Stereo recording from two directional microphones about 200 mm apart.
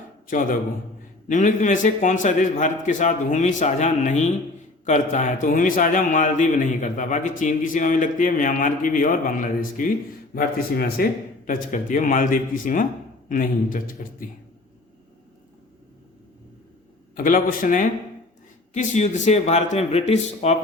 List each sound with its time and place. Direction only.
0.3 s a man's voice: 40° left (ahead or behind)
17.2 s a man's voice: 45° left (ahead or behind)